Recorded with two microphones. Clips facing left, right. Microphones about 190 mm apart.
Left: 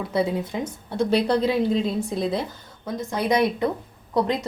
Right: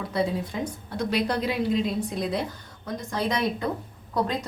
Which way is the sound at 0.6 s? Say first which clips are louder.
Left 4 dB; 25° left (ahead or behind).